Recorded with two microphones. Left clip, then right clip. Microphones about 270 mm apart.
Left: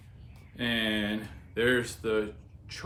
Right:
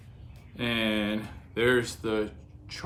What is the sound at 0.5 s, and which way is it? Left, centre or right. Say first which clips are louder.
Speech: right 1 dB; centre.